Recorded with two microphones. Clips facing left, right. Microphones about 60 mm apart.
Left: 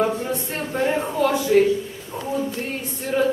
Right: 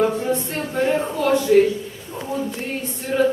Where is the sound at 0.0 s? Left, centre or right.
Centre.